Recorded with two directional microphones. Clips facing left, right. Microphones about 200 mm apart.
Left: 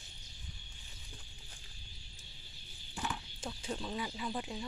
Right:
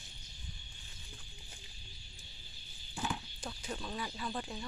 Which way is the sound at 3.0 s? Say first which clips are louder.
Right 2 dB; 10° right (ahead or behind).